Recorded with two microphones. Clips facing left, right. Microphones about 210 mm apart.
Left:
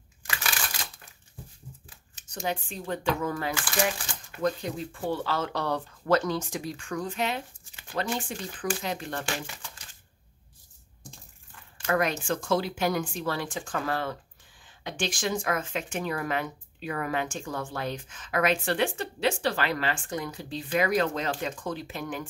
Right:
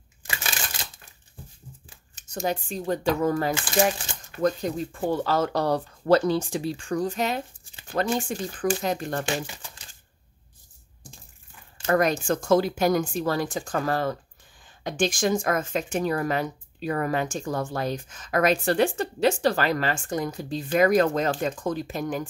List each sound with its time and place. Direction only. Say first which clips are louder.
0.4 s a sound: even; 25° right (ahead or behind)
2.1 s speech: right 4 dB; 45° right (ahead or behind)
3.5 s speech: right 6 dB; 25° right (ahead or behind)
4.4 s speech: right 4 dB; 45° right (ahead or behind)
11.8 s speech: right 5 dB; 40° right (ahead or behind)